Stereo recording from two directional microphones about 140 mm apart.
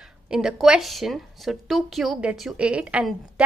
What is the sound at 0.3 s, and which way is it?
A woman's voice, 5° right (ahead or behind).